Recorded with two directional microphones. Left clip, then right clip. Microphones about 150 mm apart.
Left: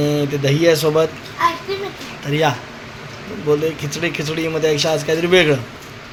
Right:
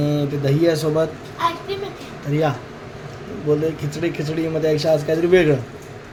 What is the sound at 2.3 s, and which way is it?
Speech, 5° left (ahead or behind).